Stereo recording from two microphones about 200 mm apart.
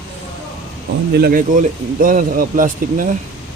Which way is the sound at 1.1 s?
50° right (ahead or behind).